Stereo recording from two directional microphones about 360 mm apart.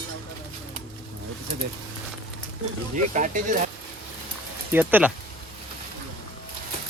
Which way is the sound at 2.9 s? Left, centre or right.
Right.